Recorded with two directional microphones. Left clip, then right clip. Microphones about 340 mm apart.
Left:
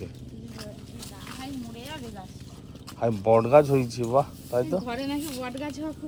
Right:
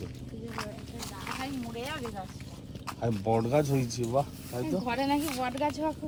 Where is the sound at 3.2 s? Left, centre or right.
Left.